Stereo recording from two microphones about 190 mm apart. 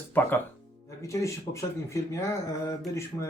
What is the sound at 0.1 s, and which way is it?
Speech, 10° left (ahead or behind).